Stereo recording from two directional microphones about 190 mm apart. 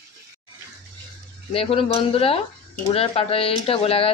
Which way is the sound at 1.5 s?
30° left (ahead or behind).